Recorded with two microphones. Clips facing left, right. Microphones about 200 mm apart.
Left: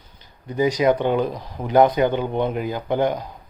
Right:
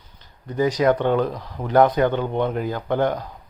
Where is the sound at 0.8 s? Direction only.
10° left (ahead or behind).